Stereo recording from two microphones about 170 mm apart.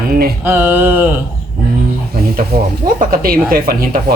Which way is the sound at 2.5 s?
65° right (ahead or behind).